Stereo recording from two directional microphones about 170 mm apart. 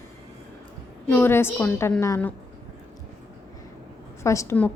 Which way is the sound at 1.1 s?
15° left (ahead or behind).